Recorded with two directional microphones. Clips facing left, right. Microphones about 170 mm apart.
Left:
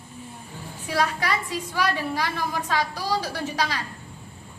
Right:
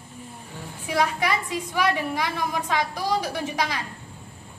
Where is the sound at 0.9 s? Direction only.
20° right (ahead or behind).